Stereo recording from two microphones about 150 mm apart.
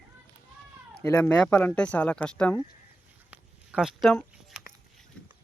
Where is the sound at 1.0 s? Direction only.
15° left (ahead or behind).